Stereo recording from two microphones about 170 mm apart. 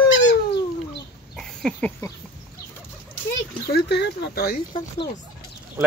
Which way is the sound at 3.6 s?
70° left (ahead or behind).